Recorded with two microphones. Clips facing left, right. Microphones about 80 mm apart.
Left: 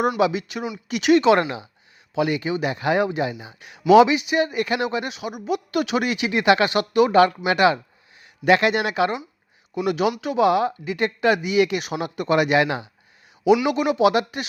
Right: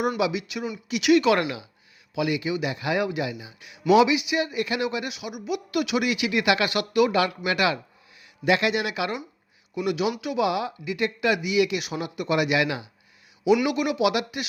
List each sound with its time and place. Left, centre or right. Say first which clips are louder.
0.2 s speech: left 4 dB; left
4.9 s speech: left 4 dB; left
8.4 s speech: left 5 dB; left